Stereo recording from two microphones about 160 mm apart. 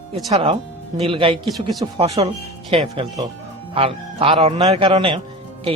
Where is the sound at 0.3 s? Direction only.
35° right (ahead or behind).